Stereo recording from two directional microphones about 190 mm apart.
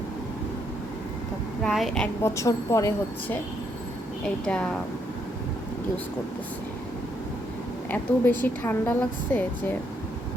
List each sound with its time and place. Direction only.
1.6 s speech: centre (ahead or behind)
2.2 s a woman's voice: 15° left (ahead or behind)
7.9 s a woman's voice: 10° left (ahead or behind)